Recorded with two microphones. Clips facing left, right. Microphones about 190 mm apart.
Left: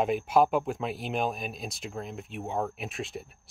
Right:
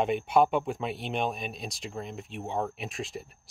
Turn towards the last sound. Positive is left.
turn(degrees=0)  # may be behind; listen again after turning